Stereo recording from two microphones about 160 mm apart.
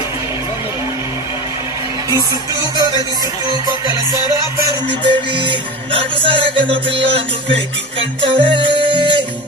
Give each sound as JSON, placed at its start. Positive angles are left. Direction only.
{"t": 2.0, "sound": "music", "side_deg": -25}